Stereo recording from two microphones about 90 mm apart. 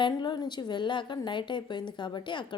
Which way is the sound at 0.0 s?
55° left (ahead or behind).